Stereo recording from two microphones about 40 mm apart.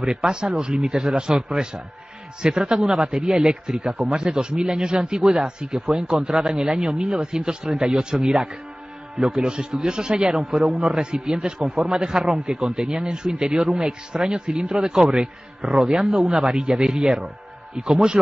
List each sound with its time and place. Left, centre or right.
0.0 s a man's voice: centre